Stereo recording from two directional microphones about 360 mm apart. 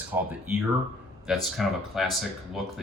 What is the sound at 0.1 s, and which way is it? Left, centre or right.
Speech, centre.